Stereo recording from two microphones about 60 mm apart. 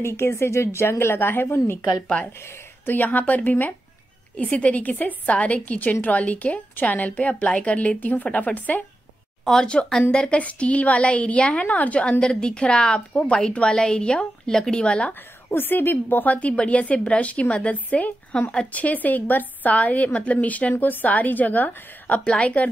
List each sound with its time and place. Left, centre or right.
0.0 s a woman's voice: left
2.8 s a woman's voice: left
9.4 s a woman's voice: centre
15.5 s a woman's voice: left
18.3 s a woman's voice: centre
18.7 s a woman's voice: left